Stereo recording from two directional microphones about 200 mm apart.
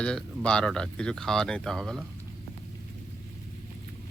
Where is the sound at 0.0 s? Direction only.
5° left (ahead or behind).